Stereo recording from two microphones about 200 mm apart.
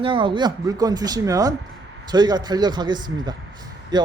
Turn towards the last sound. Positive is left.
turn(degrees=-20)  # may be behind; listen again after turning